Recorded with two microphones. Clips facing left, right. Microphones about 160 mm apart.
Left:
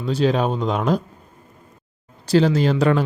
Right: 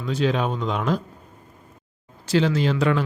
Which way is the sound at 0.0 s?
35° left (ahead or behind).